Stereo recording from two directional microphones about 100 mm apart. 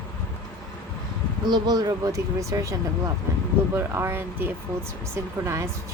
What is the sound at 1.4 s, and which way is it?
Speech, 45° right (ahead or behind).